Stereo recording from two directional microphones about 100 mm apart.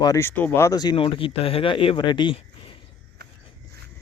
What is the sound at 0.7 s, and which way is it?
Speech, 45° left (ahead or behind).